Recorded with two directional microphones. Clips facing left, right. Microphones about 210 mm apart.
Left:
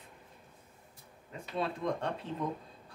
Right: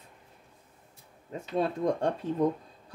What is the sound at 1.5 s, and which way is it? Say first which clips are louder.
Speech: right 6 dB; 40° right (ahead or behind).